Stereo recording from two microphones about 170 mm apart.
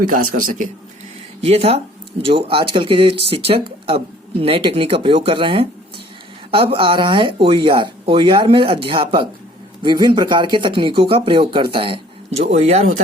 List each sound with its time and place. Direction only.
0.1 s a man's voice: 50° right (ahead or behind)
1.4 s speech: 35° right (ahead or behind)